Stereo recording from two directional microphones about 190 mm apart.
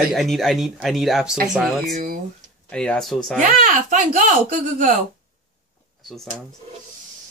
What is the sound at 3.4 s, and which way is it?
Speech, 45° right (ahead or behind).